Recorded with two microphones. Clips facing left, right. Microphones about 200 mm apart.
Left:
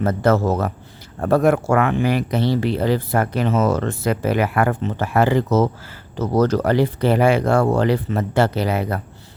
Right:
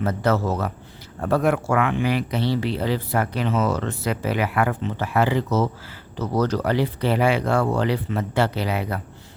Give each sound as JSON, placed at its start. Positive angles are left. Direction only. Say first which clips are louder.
{"t": 0.0, "sound": "speech", "louder": "left 4 dB", "side_deg": 45}